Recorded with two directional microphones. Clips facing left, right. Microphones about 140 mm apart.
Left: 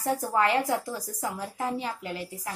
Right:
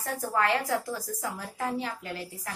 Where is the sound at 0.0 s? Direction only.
15° left (ahead or behind).